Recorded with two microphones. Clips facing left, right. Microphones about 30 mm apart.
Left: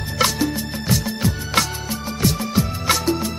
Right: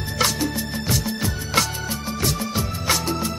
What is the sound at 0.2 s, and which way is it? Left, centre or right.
Music, centre.